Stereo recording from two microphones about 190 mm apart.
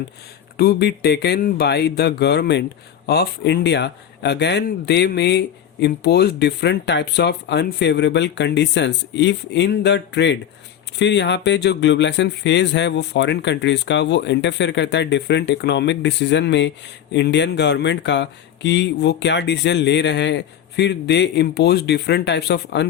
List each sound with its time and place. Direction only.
0.5 s speech: 55° left (ahead or behind)